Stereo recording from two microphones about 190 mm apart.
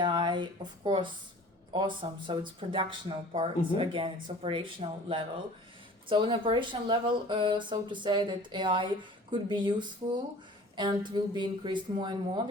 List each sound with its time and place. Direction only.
0.0 s speech: 25° right (ahead or behind)